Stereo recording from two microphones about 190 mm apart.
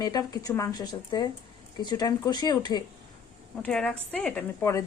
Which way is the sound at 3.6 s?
5° left (ahead or behind).